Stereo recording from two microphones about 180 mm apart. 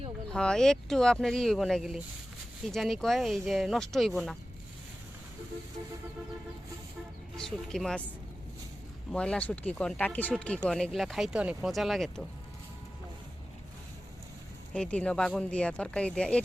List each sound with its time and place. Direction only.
0.3 s speech: 5° left (ahead or behind)
7.3 s speech: 5° left (ahead or behind)
9.1 s speech: 5° left (ahead or behind)
14.7 s speech: 5° left (ahead or behind)